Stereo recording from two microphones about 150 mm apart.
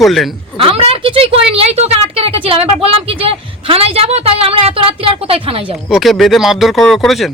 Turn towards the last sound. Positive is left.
turn(degrees=0)  # may be behind; listen again after turning